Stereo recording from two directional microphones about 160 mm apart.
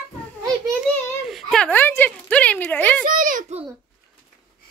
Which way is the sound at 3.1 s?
60° right (ahead or behind).